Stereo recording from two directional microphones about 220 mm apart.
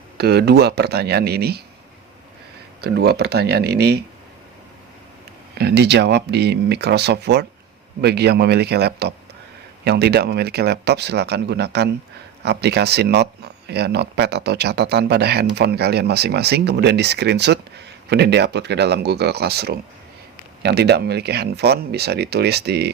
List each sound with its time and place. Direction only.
0.2 s speech: 45° right (ahead or behind)
2.8 s speech: 45° right (ahead or behind)
5.5 s speech: 50° right (ahead or behind)